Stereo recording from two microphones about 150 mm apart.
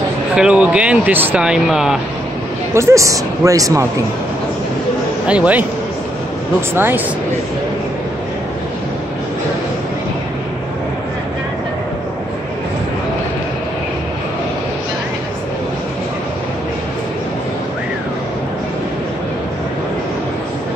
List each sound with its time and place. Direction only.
0.4 s speech: 5° right (ahead or behind)
2.7 s a man's voice: 20° right (ahead or behind)
5.2 s speech: 10° right (ahead or behind)
6.7 s speech: 15° right (ahead or behind)